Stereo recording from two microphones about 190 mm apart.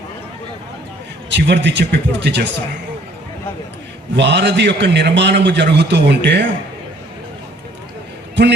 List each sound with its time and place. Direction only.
1.3 s a man's voice: 65° right (ahead or behind)
4.1 s a man's voice: 65° right (ahead or behind)